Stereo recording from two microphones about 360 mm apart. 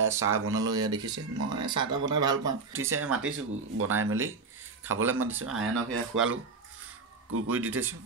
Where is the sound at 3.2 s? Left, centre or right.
Right.